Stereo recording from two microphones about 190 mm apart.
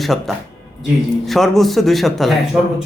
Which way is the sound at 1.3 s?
Centre (ahead or behind).